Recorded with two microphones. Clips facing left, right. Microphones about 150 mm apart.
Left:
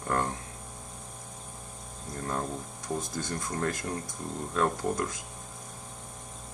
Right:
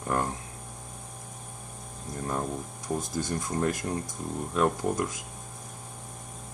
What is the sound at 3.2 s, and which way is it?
Speech, 15° right (ahead or behind).